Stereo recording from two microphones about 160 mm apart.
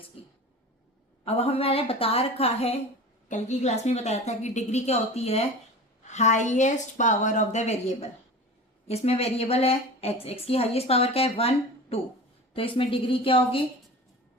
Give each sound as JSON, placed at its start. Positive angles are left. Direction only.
{"t": 1.2, "sound": "a woman's voice", "side_deg": 40}